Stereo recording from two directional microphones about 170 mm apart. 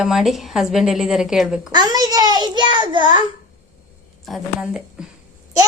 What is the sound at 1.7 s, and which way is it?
A child's voice, 25° right (ahead or behind).